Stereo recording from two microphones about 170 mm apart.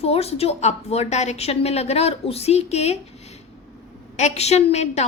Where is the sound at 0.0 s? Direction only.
35° left (ahead or behind).